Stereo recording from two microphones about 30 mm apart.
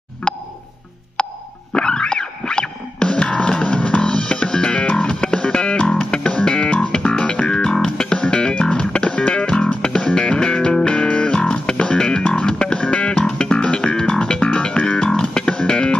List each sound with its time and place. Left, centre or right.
0.3 s music: left
6.9 s music: left
7.2 s music: left
7.8 s music: left
8.2 s music: left
10.9 s music: left
15.0 s music: left